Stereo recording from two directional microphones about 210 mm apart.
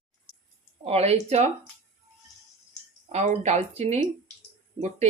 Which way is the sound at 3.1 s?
30° right (ahead or behind).